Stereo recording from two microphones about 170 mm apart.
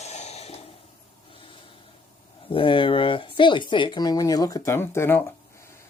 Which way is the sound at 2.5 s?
30° left (ahead or behind).